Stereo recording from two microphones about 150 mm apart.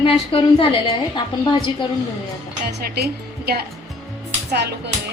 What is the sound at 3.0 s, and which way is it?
A woman's voice, 90° right.